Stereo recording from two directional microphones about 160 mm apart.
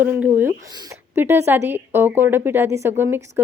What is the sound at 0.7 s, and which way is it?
Speech, 25° right (ahead or behind).